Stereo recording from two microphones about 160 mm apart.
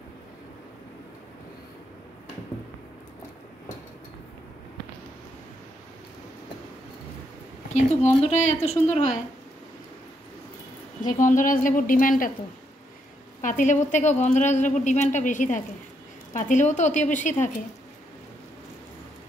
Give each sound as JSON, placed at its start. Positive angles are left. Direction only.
{"t": 7.7, "sound": "a woman's voice", "side_deg": 45}
{"t": 11.1, "sound": "a woman's voice", "side_deg": 55}
{"t": 13.4, "sound": "a woman's voice", "side_deg": 55}